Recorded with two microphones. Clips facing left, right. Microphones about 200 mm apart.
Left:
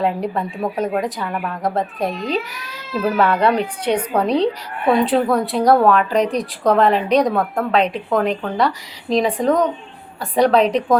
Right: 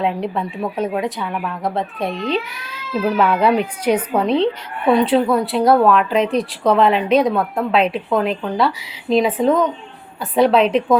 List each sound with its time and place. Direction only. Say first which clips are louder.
0.0 s a woman's voice: even; centre (ahead or behind)